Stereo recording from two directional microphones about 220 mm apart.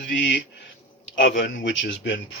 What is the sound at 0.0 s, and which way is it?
Speech, 55° left (ahead or behind).